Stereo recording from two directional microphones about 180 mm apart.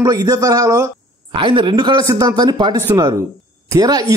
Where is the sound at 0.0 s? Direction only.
20° right (ahead or behind).